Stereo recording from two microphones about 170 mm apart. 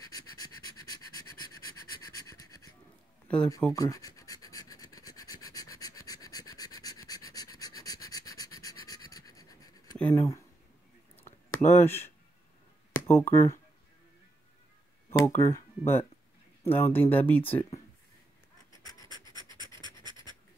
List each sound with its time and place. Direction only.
0.1 s a sound: 20° left (ahead or behind)
2.0 s pant: 25° left (ahead or behind)
3.3 s speech: 5° left (ahead or behind)
3.7 s scratch: 20° left (ahead or behind)
9.9 s writing: 10° left (ahead or behind)
11.2 s a sound: 15° left (ahead or behind)
13.0 s speech: 10° left (ahead or behind)
15.0 s speech: 15° left (ahead or behind)
18.7 s scratch: 20° left (ahead or behind)
19.3 s scratch: 25° right (ahead or behind)